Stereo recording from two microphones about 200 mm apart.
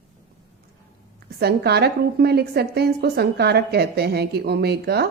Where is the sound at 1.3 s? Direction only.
55° right (ahead or behind).